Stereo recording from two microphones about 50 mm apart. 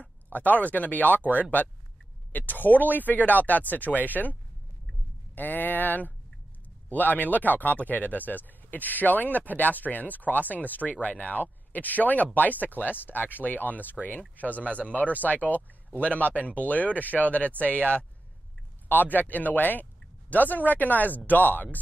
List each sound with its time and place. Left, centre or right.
0.3 s speech: left
17.5 s speech: right
18.9 s speech: left